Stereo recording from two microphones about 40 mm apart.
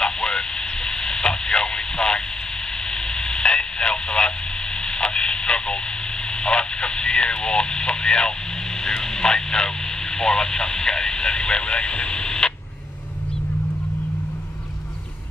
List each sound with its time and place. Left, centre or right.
0.0 s a sound: centre
2.9 s radio: centre
8.8 s speech: centre